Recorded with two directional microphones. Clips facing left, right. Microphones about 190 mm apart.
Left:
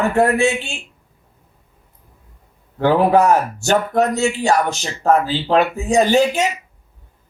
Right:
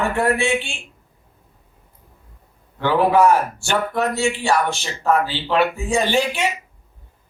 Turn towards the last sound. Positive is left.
turn(degrees=40)  # may be behind; listen again after turning